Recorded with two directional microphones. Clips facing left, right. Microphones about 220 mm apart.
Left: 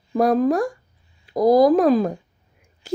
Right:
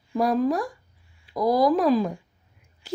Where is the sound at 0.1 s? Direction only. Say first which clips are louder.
Left 5 dB; 50° left (ahead or behind).